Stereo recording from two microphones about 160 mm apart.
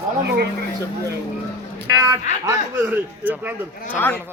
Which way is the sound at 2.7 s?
10° right (ahead or behind).